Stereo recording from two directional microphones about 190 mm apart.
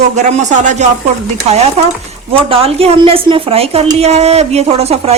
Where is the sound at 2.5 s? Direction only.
30° right (ahead or behind).